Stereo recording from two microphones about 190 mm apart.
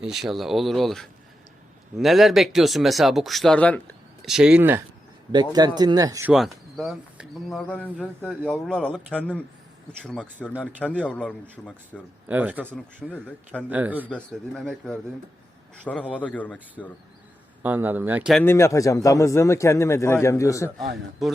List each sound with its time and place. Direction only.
0.0 s speech: centre (ahead or behind)
5.5 s speech: 20° right (ahead or behind)
6.3 s a man's voice: centre (ahead or behind)
12.3 s speech: 10° right (ahead or behind)
12.7 s a man's voice: 5° left (ahead or behind)
13.7 s speech: 10° right (ahead or behind)
14.1 s a man's voice: 5° left (ahead or behind)
17.6 s speech: 10° right (ahead or behind)
18.4 s a man's voice: 15° left (ahead or behind)
21.2 s speech: centre (ahead or behind)